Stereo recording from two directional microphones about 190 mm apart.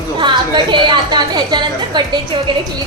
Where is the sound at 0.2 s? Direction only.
25° right (ahead or behind).